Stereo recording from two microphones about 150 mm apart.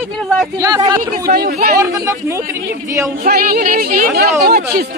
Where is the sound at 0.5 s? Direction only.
25° right (ahead or behind).